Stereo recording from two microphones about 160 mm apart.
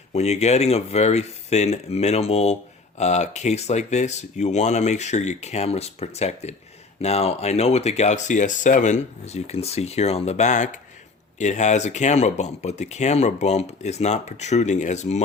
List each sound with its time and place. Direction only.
0.1 s speech: 45° left (ahead or behind)